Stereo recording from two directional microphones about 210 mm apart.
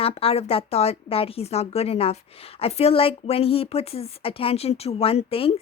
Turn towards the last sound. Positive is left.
turn(degrees=25)  # may be behind; listen again after turning